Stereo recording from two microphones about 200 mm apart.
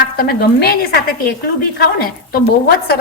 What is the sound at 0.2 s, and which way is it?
A woman's voice, 50° left (ahead or behind).